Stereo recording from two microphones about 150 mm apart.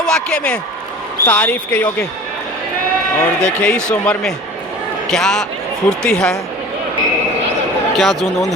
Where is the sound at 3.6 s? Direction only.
5° left (ahead or behind).